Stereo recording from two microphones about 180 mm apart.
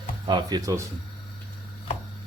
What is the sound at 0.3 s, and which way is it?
Speech, 20° right (ahead or behind).